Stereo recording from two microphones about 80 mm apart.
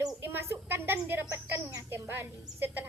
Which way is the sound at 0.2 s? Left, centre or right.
Right.